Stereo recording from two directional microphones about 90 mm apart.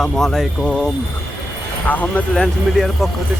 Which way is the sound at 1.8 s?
20° left (ahead or behind).